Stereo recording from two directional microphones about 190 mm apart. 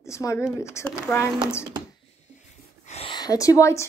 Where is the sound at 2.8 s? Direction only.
35° left (ahead or behind).